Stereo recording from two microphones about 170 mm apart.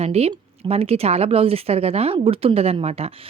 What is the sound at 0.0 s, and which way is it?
A woman's voice, 35° right (ahead or behind).